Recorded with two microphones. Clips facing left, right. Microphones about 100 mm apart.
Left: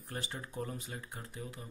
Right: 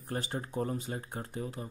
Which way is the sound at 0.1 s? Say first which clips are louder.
Right 7 dB; 40° right (ahead or behind).